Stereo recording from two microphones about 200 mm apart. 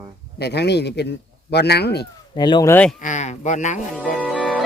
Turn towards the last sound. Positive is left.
turn(degrees=5)  # may be behind; listen again after turning